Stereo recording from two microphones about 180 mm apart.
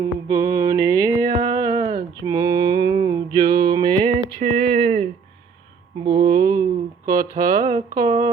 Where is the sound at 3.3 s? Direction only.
20° right (ahead or behind).